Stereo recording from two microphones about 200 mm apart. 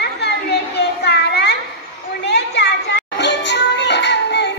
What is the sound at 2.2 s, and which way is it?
Music, 55° left (ahead or behind).